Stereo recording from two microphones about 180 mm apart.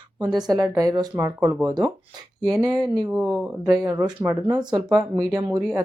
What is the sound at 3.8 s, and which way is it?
Speech, 15° right (ahead or behind).